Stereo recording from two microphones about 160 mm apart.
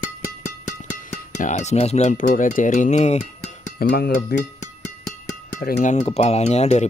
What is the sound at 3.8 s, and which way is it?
Speech, 75° left (ahead or behind).